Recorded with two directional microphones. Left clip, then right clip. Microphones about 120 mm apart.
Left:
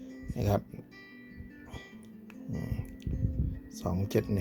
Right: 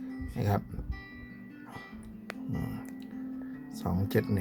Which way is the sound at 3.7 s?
20° left (ahead or behind).